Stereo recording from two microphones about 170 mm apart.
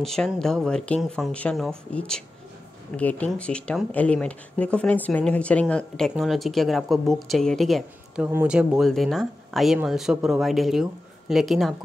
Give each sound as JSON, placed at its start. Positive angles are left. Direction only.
{"t": 0.0, "sound": "speech", "side_deg": 5}